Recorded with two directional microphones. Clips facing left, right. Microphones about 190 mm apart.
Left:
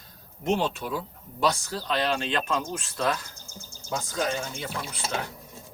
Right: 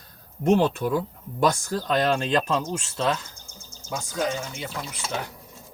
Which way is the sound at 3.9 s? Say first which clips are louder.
Right 1 dB; 15° right (ahead or behind).